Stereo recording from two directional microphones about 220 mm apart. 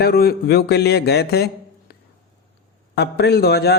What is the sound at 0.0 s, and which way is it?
A man's voice, 45° left (ahead or behind).